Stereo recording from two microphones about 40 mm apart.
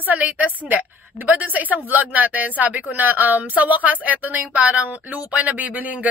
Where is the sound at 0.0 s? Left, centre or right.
Right.